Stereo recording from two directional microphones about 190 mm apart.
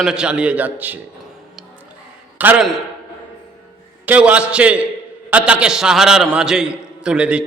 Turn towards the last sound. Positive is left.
turn(degrees=-5)  # may be behind; listen again after turning